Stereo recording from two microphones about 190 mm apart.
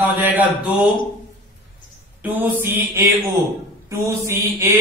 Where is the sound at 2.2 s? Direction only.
10° right (ahead or behind).